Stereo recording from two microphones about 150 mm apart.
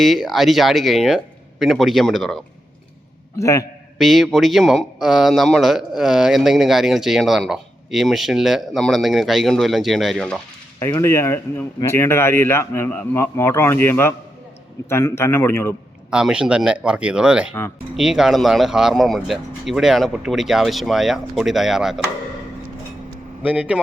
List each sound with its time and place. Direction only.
0.0 s speech: centre (ahead or behind)
3.3 s a man's voice: 20° left (ahead or behind)
3.9 s speech: centre (ahead or behind)
10.8 s speech: 20° left (ahead or behind)
16.0 s speech: 5° right (ahead or behind)
23.4 s speech: 10° right (ahead or behind)